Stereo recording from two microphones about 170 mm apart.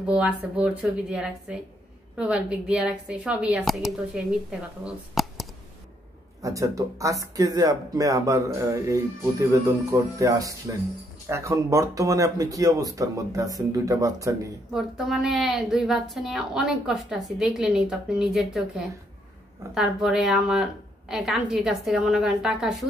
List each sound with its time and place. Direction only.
0.0 s a woman's voice: 5° right (ahead or behind)
6.4 s speech: 20° right (ahead or behind)
14.7 s a woman's voice: centre (ahead or behind)